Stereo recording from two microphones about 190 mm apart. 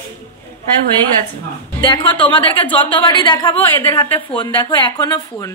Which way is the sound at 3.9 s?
25° left (ahead or behind).